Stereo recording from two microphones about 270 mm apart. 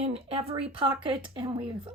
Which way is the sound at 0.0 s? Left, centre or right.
Right.